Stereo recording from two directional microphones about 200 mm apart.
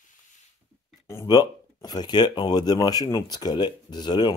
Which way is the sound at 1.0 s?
15° left (ahead or behind).